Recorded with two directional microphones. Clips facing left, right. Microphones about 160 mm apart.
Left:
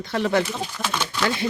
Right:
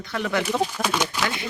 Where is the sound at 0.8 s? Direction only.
10° right (ahead or behind).